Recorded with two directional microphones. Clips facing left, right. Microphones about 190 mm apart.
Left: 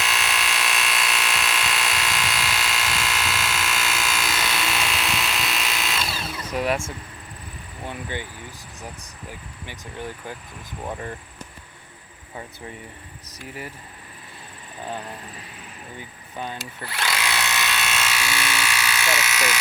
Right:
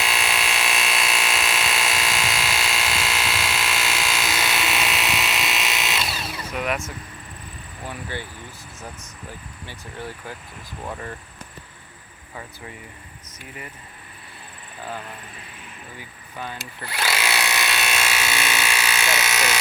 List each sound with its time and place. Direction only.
0.0 s electric toothbrush: 15° right (ahead or behind)
6.0 s drill: 5° right (ahead or behind)
6.5 s vehicle: 30° left (ahead or behind)
7.9 s vehicle: 20° left (ahead or behind)
9.6 s speech: 15° left (ahead or behind)
16.8 s electric toothbrush: 10° right (ahead or behind); by 19.5 s 30° right (ahead or behind)